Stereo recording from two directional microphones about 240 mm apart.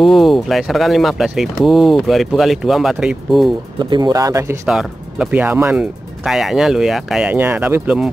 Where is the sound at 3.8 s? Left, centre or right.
Centre.